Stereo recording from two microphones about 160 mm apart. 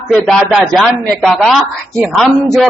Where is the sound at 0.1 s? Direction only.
Centre (ahead or behind).